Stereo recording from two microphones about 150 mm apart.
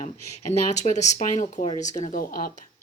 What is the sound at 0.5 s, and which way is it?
Speech, 50° left (ahead or behind).